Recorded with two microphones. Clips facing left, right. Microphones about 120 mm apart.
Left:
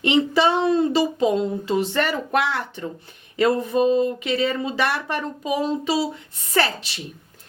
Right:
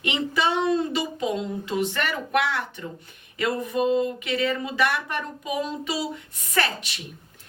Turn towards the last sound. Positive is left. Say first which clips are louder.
# left 4 dB
turn(degrees=30)  # may be behind; listen again after turning